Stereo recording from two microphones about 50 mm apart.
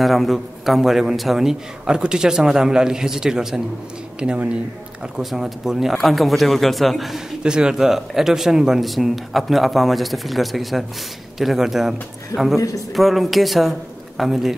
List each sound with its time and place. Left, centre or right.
0.0 s a man's voice: centre
4.2 s speech: right
5.2 s a man's voice: centre
7.4 s a man's voice: centre
12.5 s a man's voice: left
12.9 s speech: centre